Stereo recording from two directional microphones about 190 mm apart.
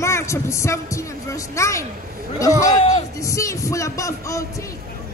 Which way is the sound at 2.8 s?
35° left (ahead or behind).